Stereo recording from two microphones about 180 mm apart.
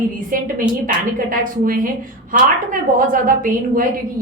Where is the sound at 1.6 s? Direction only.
50° right (ahead or behind).